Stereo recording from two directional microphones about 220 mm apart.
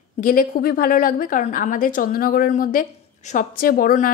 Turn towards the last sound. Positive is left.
turn(degrees=40)  # may be behind; listen again after turning